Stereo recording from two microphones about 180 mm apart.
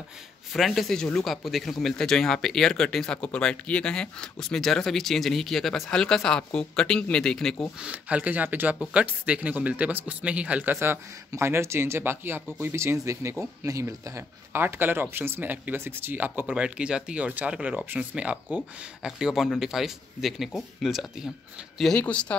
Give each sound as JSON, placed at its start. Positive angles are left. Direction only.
{"t": 0.5, "sound": "speech", "side_deg": 0}